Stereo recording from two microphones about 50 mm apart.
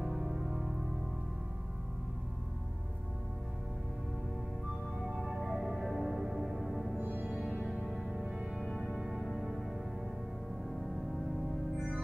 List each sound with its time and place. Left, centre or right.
0.0 s music: centre
5.0 s music: centre
7.0 s music: right
7.6 s music: centre
8.6 s music: centre